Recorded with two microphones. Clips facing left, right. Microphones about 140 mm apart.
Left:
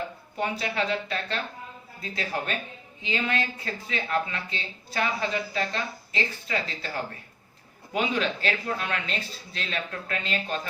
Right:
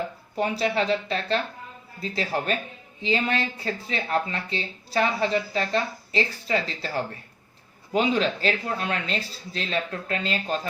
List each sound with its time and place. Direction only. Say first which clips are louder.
0.3 s speech: right 4 dB; 35° right (ahead or behind)